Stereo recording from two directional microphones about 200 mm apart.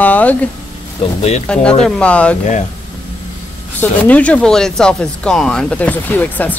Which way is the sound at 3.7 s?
10° left (ahead or behind).